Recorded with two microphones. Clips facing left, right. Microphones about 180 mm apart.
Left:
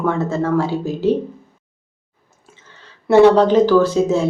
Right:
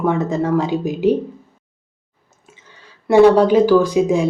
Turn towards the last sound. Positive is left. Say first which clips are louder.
# even
turn(degrees=-15)  # may be behind; listen again after turning